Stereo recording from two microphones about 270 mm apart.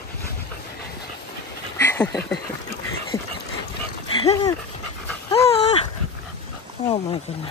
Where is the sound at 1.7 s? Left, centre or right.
Centre.